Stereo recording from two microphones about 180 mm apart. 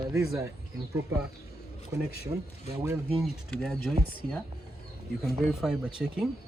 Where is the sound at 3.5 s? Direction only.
Centre (ahead or behind).